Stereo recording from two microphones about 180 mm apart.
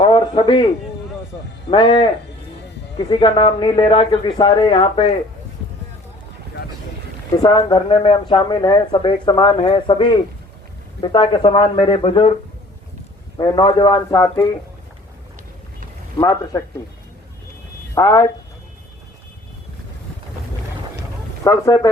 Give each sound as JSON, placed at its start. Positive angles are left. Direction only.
{"t": 0.0, "sound": "a sound", "side_deg": 30}
{"t": 1.7, "sound": "speech", "side_deg": 25}
{"t": 3.1, "sound": "speech", "side_deg": 25}
{"t": 7.3, "sound": "speech", "side_deg": 25}
{"t": 13.3, "sound": "speech", "side_deg": 25}
{"t": 16.1, "sound": "speech", "side_deg": 20}
{"t": 17.9, "sound": "speech", "side_deg": 20}
{"t": 21.4, "sound": "speech", "side_deg": 20}